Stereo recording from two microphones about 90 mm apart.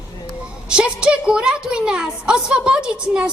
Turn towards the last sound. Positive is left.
turn(degrees=-10)  # may be behind; listen again after turning